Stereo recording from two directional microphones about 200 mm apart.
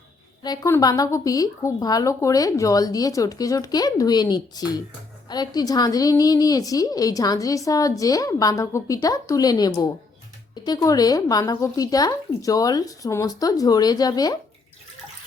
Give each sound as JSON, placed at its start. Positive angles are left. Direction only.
{"t": 0.4, "sound": "a woman's voice", "side_deg": 15}